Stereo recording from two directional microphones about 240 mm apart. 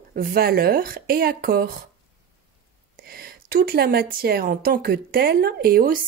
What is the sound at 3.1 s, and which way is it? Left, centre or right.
Speech, right.